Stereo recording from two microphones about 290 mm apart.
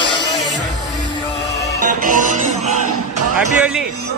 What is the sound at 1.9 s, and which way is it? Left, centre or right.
Music, right.